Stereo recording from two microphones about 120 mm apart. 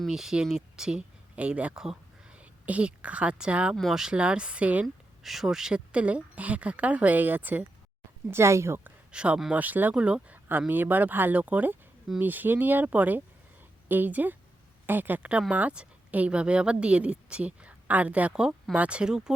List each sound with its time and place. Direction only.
0.0 s speech: 5° right (ahead or behind); by 8.9 s 20° right (ahead or behind)
9.1 s speech: 10° right (ahead or behind)